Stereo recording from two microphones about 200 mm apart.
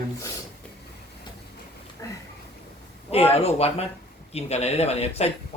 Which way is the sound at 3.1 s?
30° left (ahead or behind).